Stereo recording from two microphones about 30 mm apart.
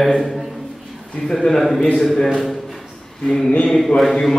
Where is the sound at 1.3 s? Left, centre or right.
Centre.